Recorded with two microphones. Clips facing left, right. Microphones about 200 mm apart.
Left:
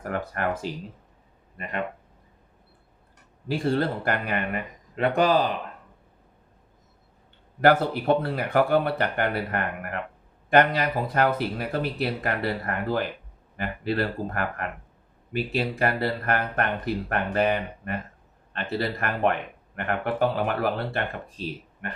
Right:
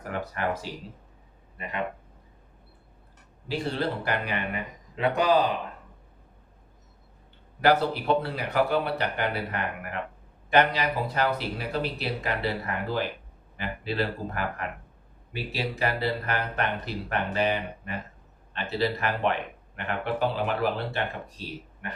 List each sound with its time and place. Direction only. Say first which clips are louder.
0.0 s speech: left 2 dB; 50° left (ahead or behind)
3.5 s speech: left 4 dB; 50° left (ahead or behind)
7.6 s speech: left 3 dB; 50° left (ahead or behind)